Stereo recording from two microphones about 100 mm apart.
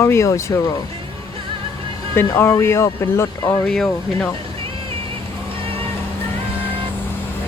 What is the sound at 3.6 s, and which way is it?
Speech, 5° left (ahead or behind).